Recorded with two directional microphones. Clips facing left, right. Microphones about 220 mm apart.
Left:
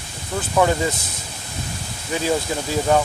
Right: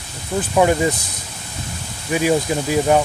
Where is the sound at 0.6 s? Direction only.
15° right (ahead or behind).